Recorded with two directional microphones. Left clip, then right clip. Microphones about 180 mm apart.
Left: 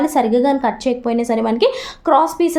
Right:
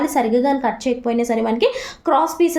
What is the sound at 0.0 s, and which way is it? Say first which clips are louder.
A woman's voice: left 2 dB; 35° left (ahead or behind).